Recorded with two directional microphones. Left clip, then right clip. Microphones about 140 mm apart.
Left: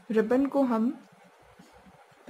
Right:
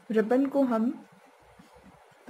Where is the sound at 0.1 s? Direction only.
Centre (ahead or behind).